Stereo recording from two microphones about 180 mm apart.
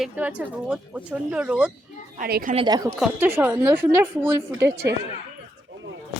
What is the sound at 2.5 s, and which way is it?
Speech, 30° right (ahead or behind).